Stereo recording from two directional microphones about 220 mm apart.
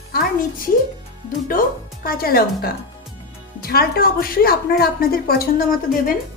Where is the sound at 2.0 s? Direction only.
40° left (ahead or behind).